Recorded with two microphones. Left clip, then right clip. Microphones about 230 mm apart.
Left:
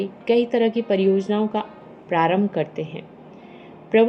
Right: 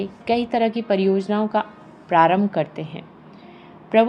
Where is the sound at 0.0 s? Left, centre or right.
Right.